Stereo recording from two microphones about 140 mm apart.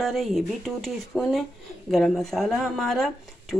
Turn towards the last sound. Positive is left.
turn(degrees=0)  # may be behind; listen again after turning